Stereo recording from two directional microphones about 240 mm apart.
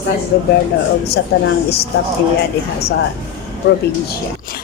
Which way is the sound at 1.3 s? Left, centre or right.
Left.